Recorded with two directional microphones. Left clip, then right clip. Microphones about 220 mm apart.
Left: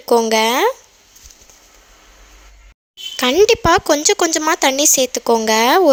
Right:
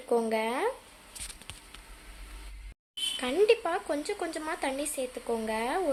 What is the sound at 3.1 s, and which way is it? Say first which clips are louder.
Speech: left 13 dB; 45° left (ahead or behind).